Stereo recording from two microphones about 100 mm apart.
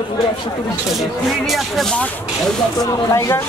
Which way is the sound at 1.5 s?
5° left (ahead or behind).